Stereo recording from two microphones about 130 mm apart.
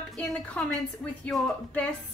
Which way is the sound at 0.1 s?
5° left (ahead or behind).